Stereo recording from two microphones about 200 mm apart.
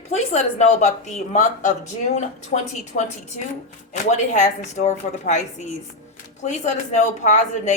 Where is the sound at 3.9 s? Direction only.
35° left (ahead or behind).